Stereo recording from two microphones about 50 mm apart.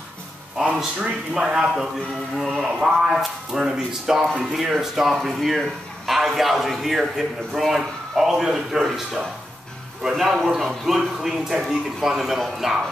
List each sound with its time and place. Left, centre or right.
0.7 s a man's voice: centre